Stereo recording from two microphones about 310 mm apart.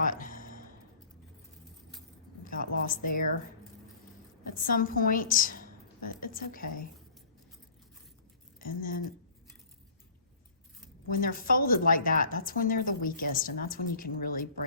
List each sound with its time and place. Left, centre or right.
0.0 s a sound: left
2.4 s a woman's voice: left
4.5 s a woman's voice: left
8.5 s speech: left
11.1 s a woman's voice: left